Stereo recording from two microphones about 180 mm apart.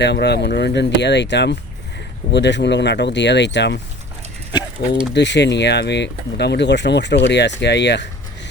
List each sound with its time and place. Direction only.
0.0 s speech: 70° left (ahead or behind)
5.1 s speech: 75° left (ahead or behind)